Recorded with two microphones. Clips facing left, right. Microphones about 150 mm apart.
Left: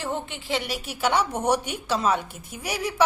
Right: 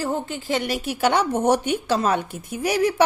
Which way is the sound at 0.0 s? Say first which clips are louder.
Right 5 dB; 40° right (ahead or behind).